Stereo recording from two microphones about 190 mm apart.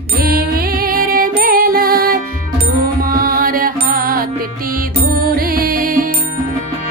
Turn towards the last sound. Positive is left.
turn(degrees=-45)  # may be behind; listen again after turning